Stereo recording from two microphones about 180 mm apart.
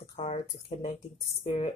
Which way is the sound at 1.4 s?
35° left (ahead or behind).